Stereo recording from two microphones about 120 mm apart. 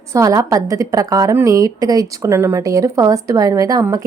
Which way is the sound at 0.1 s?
25° right (ahead or behind).